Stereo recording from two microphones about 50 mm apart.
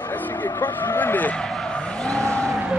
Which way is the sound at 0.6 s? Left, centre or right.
Left.